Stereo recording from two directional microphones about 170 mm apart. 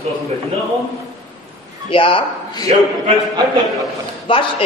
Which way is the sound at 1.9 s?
30° left (ahead or behind).